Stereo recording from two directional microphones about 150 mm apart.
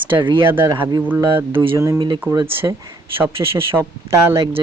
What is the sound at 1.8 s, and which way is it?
Speech, 25° right (ahead or behind).